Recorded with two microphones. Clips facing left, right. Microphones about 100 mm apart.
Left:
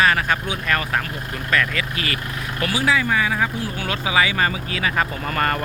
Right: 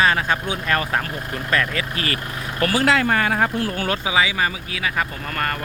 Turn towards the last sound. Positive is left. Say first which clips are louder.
# left 3 dB
turn(degrees=5)  # may be behind; listen again after turning